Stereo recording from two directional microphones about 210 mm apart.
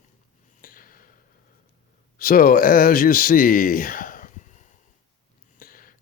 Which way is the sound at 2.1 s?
45° left (ahead or behind).